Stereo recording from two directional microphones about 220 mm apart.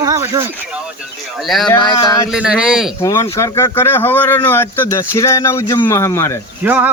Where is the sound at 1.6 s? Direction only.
20° left (ahead or behind).